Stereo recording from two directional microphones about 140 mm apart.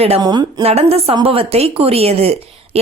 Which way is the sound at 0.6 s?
45° right (ahead or behind).